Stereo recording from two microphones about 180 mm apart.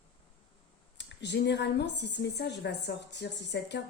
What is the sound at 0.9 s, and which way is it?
A woman's voice, 75° left (ahead or behind).